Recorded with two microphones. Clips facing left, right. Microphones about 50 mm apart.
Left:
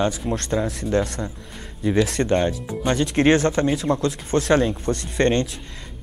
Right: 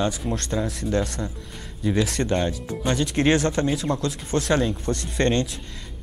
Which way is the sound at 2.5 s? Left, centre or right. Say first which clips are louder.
Left 2 dB; centre.